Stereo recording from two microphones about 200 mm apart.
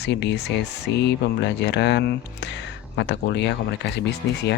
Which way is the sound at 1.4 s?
60° left (ahead or behind).